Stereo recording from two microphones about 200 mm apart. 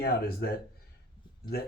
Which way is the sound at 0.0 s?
50° left (ahead or behind).